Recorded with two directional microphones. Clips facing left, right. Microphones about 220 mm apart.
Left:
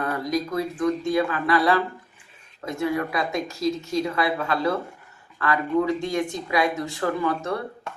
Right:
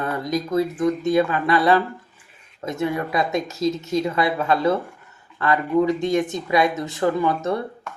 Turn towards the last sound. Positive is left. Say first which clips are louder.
# right 4 dB
turn(degrees=-20)  # may be behind; listen again after turning